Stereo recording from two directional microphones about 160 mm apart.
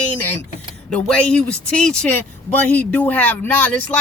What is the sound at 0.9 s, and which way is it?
Speech, 5° left (ahead or behind).